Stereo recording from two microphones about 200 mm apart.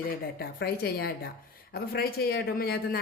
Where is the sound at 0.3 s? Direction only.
50° left (ahead or behind).